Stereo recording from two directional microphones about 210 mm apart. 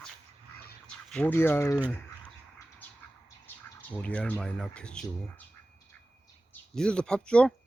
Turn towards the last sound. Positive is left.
turn(degrees=5)  # may be behind; listen again after turning